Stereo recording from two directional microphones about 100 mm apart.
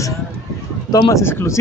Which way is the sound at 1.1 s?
25° left (ahead or behind).